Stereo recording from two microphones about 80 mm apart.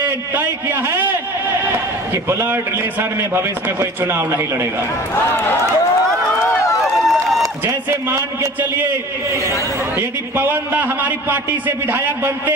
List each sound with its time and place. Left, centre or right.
0.0 s a man's voice: right
2.2 s a man's voice: right
5.3 s speech: left
7.1 s run: centre
7.9 s a man's voice: right
9.9 s a man's voice: right